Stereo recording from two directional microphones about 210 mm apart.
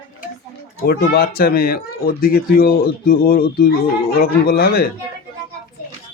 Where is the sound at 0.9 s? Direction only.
50° left (ahead or behind).